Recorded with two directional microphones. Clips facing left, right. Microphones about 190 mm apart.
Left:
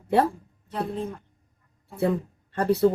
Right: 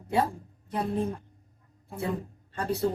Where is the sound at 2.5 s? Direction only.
60° left (ahead or behind).